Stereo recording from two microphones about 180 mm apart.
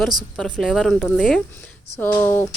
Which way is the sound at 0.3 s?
5° left (ahead or behind).